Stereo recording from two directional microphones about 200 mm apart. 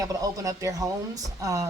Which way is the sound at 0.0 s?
15° right (ahead or behind).